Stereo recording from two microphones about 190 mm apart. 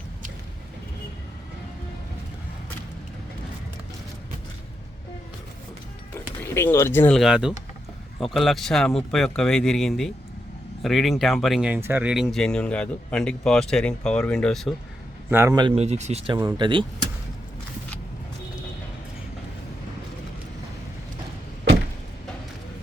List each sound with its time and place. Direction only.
6.4 s speech: 10° left (ahead or behind)
15.3 s a man's voice: 15° right (ahead or behind)